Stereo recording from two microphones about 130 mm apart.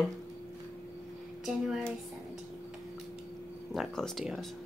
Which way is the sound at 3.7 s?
Centre (ahead or behind).